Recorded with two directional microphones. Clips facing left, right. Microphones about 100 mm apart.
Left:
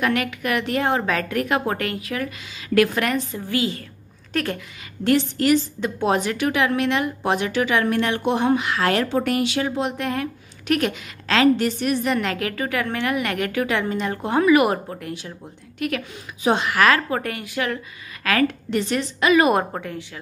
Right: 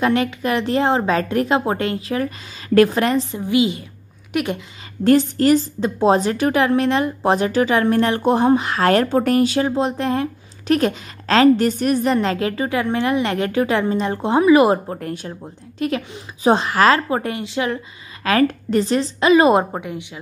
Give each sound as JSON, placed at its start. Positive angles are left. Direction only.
{"t": 0.0, "sound": "a woman's voice", "side_deg": -30}
{"t": 5.0, "sound": "a woman's voice", "side_deg": -40}
{"t": 15.8, "sound": "a woman's voice", "side_deg": -30}
{"t": 19.6, "sound": "a woman's voice", "side_deg": -15}